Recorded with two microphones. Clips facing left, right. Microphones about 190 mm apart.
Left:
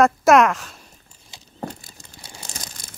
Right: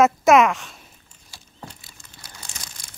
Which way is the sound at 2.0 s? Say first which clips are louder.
Left 2 dB; 30° left (ahead or behind).